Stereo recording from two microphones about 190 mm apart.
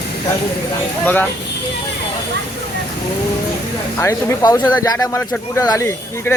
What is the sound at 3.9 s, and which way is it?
Speech, 15° left (ahead or behind).